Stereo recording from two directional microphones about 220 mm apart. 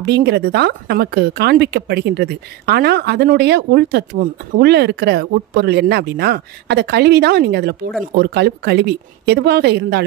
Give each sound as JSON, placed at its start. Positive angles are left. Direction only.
{"t": 0.0, "sound": "speech", "side_deg": -50}